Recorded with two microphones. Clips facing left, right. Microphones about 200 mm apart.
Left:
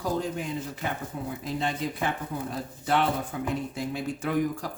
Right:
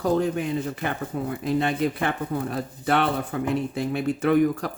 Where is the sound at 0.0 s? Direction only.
60° right (ahead or behind).